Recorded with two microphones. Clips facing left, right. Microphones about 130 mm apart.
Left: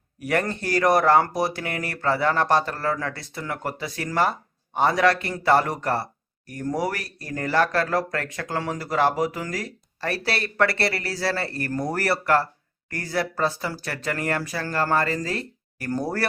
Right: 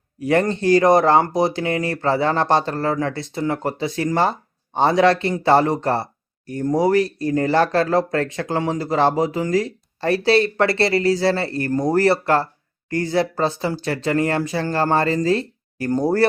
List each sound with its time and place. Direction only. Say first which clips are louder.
0.2 s speech: right 6 dB; 25° right (ahead or behind)